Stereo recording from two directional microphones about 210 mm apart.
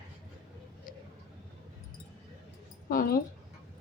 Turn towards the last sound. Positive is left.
turn(degrees=45)  # may be behind; listen again after turning